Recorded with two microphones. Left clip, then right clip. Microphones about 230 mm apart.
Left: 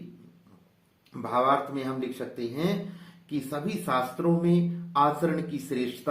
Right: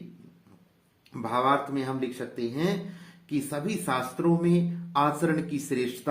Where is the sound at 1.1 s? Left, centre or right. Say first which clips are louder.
Left 1 dB; right.